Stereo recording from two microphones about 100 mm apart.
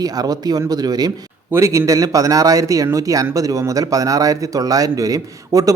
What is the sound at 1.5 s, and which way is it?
A man's voice, 30° right (ahead or behind).